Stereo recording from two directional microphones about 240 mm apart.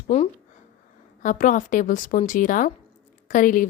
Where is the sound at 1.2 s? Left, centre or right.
Left.